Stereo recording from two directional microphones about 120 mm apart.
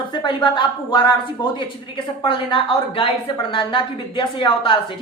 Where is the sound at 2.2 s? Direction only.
45° left (ahead or behind).